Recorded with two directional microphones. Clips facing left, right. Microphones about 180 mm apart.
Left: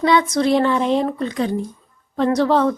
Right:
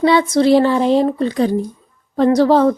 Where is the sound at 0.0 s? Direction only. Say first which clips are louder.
Right 4 dB; 30° right (ahead or behind).